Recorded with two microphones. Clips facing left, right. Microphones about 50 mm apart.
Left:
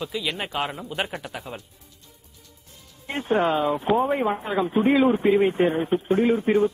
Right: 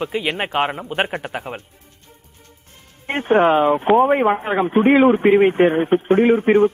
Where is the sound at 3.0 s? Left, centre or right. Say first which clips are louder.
Right 7 dB; right.